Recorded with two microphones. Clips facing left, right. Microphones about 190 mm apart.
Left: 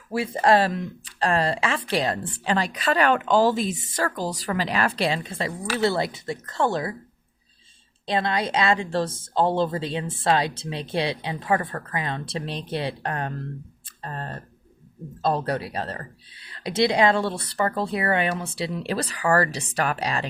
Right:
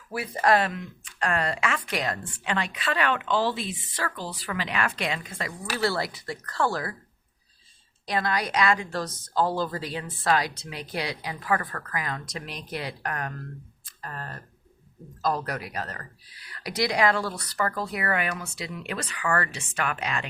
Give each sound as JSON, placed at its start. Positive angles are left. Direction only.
{"t": 0.1, "sound": "speech", "side_deg": 25}
{"t": 8.0, "sound": "a woman's voice", "side_deg": 25}